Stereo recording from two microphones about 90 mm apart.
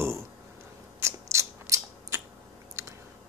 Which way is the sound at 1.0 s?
35° right (ahead or behind).